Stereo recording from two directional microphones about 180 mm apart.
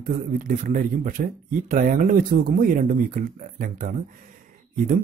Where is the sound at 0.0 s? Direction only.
45° right (ahead or behind).